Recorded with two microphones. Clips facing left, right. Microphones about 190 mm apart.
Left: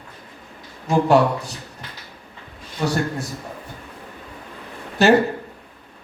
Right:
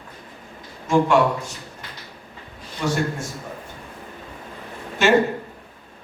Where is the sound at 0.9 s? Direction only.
35° left (ahead or behind).